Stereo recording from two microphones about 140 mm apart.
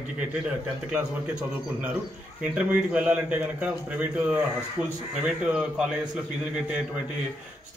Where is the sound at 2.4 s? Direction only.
5° right (ahead or behind).